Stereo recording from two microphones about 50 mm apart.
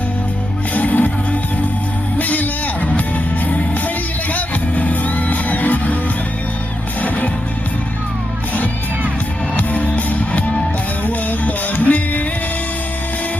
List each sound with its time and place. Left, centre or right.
0.7 s music: left
4.4 s music: left
9.6 s music: left